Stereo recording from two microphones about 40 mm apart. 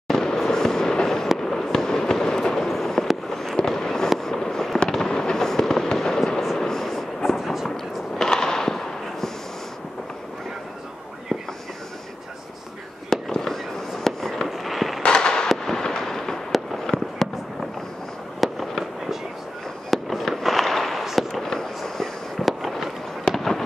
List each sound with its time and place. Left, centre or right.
0.1 s fireworks: centre
6.6 s a sound: centre
7.2 s a sound: centre
7.7 s fireworks: centre
13.1 s fireworks: centre
15.0 s fireworks: centre
15.4 s fireworks: centre
18.4 s fireworks: centre
21.3 s fireworks: centre